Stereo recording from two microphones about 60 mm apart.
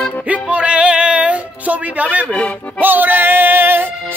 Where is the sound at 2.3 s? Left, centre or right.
Left.